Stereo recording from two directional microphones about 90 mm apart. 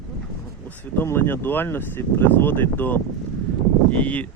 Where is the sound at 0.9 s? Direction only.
25° left (ahead or behind).